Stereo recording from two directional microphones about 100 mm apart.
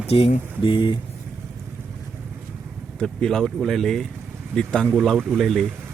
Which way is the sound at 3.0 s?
5° left (ahead or behind).